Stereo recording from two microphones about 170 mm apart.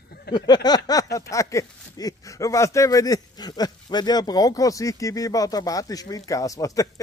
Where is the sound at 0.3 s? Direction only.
70° left (ahead or behind).